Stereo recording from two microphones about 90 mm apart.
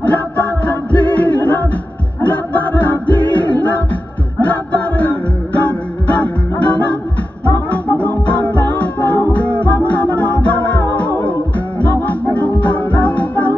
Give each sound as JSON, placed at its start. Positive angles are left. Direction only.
{"t": 0.0, "sound": "music", "side_deg": 15}